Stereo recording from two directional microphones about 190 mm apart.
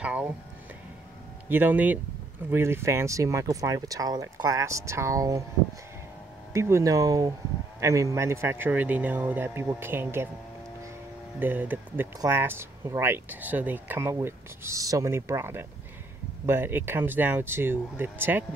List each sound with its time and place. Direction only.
0.0 s music: 5° right (ahead or behind)
1.5 s speech: 10° right (ahead or behind)
6.5 s speech: 15° right (ahead or behind)
11.3 s speech: 10° right (ahead or behind)